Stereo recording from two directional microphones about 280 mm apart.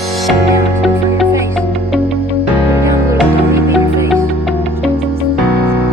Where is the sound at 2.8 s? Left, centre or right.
Centre.